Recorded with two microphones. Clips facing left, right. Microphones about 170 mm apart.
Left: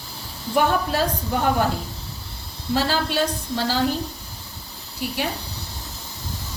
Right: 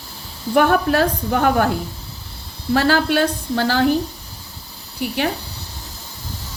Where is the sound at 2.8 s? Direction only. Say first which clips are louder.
Right 5 dB; 65° right (ahead or behind).